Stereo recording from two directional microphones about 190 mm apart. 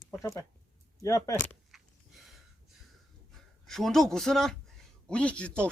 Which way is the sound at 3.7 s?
Centre (ahead or behind).